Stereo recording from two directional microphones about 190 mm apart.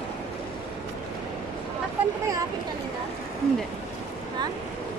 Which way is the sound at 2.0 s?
5° right (ahead or behind).